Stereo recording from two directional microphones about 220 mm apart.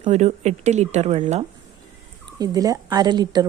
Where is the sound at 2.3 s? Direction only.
15° right (ahead or behind).